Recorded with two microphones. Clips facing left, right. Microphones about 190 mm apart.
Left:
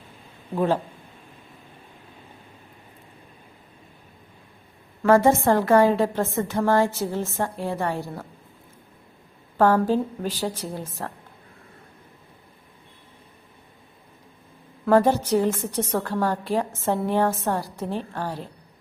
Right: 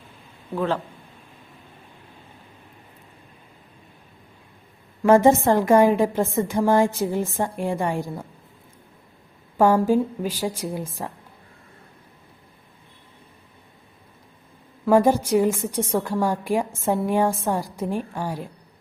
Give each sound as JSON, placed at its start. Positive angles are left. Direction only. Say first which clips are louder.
{"t": 5.0, "sound": "a woman's voice", "louder": "right 2 dB", "side_deg": -15}
{"t": 9.6, "sound": "a woman's voice", "louder": "right 2 dB", "side_deg": -10}
{"t": 14.8, "sound": "a woman's voice", "louder": "right 1 dB", "side_deg": -10}